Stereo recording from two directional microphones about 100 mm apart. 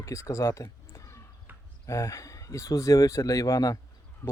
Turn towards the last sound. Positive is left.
turn(degrees=35)  # may be behind; listen again after turning